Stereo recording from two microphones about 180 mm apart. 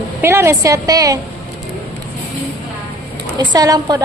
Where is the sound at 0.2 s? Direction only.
15° right (ahead or behind).